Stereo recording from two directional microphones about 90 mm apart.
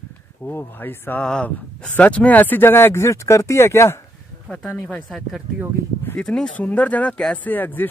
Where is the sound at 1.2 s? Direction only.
10° left (ahead or behind); by 4.0 s 30° left (ahead or behind).